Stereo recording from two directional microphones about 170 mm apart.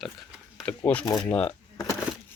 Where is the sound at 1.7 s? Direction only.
20° left (ahead or behind).